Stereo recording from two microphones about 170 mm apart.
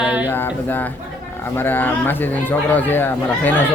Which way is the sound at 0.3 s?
10° left (ahead or behind).